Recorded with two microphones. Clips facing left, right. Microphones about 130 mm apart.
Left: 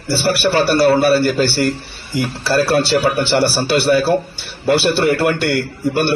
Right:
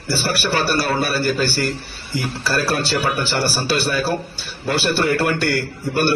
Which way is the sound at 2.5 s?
25° left (ahead or behind).